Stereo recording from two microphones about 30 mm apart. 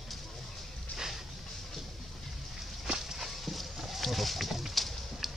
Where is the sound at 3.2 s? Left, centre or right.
Centre.